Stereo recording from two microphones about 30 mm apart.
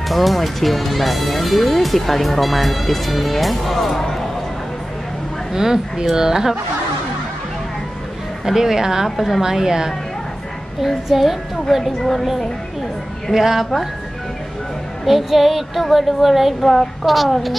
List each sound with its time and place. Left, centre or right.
0.1 s speech: centre
5.5 s speech: centre
8.5 s speech: centre
9.1 s speech: centre
9.4 s speech: centre
11.1 s speech: centre
11.8 s a woman's voice: centre
13.3 s speech: centre
15.0 s speech: centre